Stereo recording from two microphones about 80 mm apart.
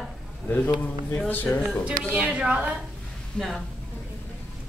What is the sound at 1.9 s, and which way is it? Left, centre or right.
Speech, centre.